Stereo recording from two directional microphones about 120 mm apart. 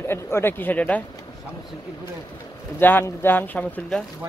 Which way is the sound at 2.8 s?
15° left (ahead or behind).